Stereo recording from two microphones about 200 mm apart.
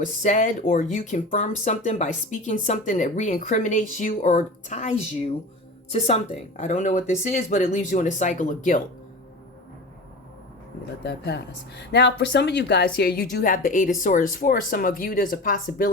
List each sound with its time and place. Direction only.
0.0 s speech: 40° left (ahead or behind)
11.0 s a woman's voice: 60° left (ahead or behind); by 15.9 s 40° left (ahead or behind)